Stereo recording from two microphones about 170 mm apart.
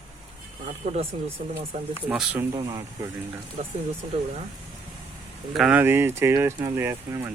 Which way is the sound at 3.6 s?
40° right (ahead or behind).